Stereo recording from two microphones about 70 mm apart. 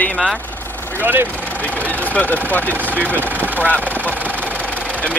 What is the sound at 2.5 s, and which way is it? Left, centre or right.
Speech, left.